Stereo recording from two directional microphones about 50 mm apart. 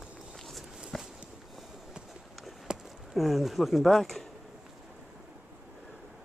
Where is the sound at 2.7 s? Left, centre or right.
Centre.